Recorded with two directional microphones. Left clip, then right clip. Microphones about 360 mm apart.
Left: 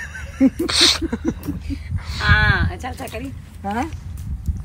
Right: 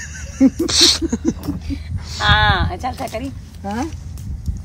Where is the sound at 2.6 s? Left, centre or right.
Right.